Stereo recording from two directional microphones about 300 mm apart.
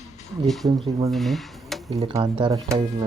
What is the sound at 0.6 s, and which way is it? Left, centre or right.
Speech, centre.